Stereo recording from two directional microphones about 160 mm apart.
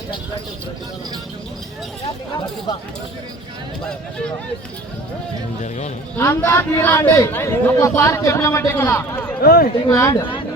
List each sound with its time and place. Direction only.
6.1 s a man's voice: 15° left (ahead or behind)
9.4 s speech: 70° left (ahead or behind)
9.9 s speech: 20° left (ahead or behind)